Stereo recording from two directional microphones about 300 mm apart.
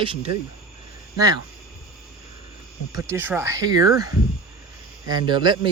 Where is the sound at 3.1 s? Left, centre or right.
Centre.